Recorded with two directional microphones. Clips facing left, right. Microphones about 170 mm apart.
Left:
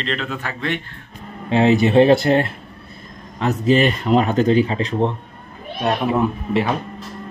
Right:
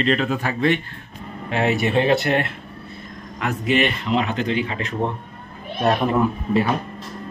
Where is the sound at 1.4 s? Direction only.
25° left (ahead or behind).